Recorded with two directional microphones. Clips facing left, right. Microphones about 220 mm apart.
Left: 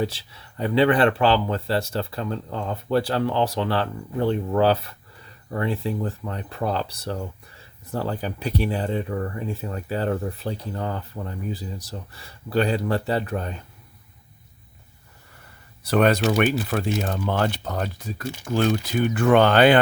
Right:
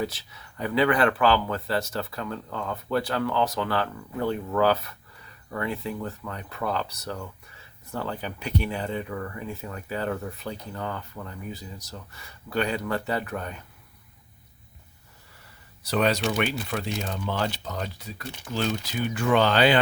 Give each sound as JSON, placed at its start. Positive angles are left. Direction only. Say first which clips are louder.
{"t": 0.0, "sound": "speech", "louder": "left 4 dB", "side_deg": 30}
{"t": 15.8, "sound": "speech", "louder": "left 5 dB", "side_deg": 55}